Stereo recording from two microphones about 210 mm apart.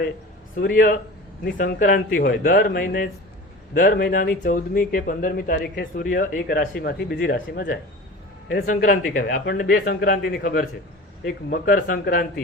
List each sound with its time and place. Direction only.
0.5 s speech: 40° left (ahead or behind)